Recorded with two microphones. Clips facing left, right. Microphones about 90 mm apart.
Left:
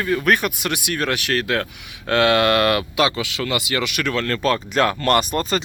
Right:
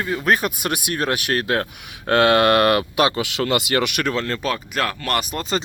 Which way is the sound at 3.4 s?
55° right (ahead or behind).